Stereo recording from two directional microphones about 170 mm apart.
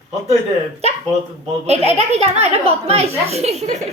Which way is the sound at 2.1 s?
40° right (ahead or behind).